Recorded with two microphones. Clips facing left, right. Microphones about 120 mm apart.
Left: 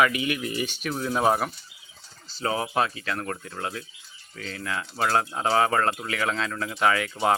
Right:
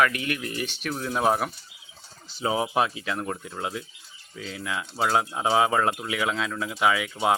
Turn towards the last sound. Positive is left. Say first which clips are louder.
# even
turn(degrees=-5)  # may be behind; listen again after turning